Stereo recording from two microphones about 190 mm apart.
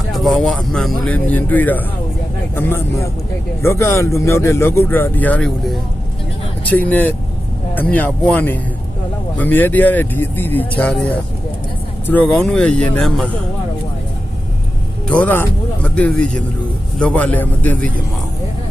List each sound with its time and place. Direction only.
0.1 s a man's voice: centre (ahead or behind)
15.0 s speech: 5° left (ahead or behind)